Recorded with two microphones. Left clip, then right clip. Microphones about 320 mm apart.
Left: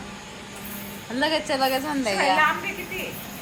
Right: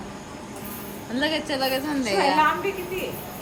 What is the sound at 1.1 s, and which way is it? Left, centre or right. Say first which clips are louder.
A woman's voice: left 2 dB; centre.